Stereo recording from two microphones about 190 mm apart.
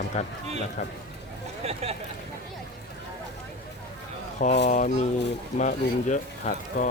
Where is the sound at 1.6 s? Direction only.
35° right (ahead or behind).